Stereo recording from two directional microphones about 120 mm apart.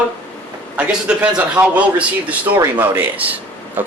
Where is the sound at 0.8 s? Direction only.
10° right (ahead or behind).